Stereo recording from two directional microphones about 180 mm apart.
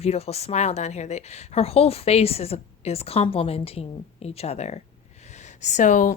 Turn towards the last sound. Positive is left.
turn(degrees=45)  # may be behind; listen again after turning